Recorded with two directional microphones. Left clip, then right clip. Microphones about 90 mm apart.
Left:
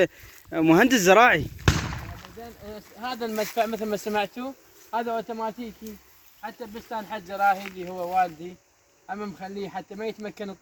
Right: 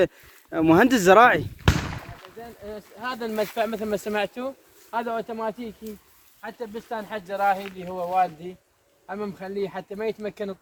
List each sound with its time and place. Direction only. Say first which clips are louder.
0.5 s speech: right 1 dB; 5° right (ahead or behind)
0.9 s speech: right 3 dB; 15° right (ahead or behind)
2.4 s speech: right 4 dB; 25° right (ahead or behind)
9.0 s speech: right 2 dB; 20° right (ahead or behind)